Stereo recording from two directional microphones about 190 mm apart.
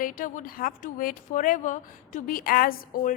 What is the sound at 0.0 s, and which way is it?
A woman's voice, 45° left (ahead or behind).